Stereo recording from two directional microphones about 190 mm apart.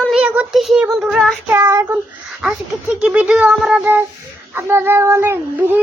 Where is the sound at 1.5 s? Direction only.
15° right (ahead or behind).